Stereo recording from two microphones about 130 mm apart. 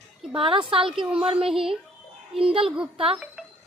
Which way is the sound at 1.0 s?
10° right (ahead or behind).